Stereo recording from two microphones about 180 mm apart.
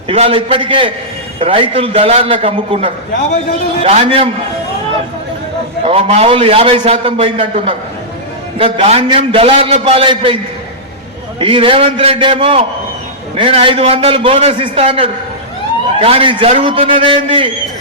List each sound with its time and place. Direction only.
0.1 s a man's voice: 30° right (ahead or behind)
5.8 s a man's voice: 35° right (ahead or behind)
11.3 s a man's voice: 30° right (ahead or behind)